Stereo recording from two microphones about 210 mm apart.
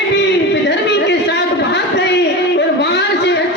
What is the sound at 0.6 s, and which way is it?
Chatter, 55° left (ahead or behind).